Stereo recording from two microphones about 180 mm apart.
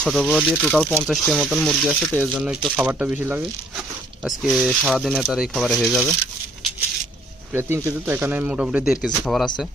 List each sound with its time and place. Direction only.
0.0 s speech: centre (ahead or behind)
2.1 s speech: 10° right (ahead or behind)
7.5 s speech: 10° right (ahead or behind)